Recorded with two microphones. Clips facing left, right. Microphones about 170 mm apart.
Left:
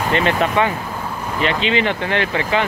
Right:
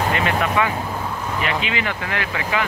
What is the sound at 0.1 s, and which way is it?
Speech, 30° left (ahead or behind).